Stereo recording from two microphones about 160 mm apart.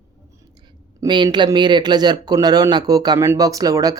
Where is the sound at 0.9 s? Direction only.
30° right (ahead or behind).